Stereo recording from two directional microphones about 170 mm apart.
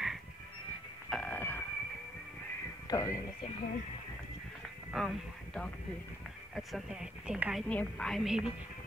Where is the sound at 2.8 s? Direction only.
20° left (ahead or behind).